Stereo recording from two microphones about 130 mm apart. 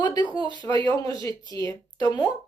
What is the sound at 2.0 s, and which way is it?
Speech, 35° left (ahead or behind).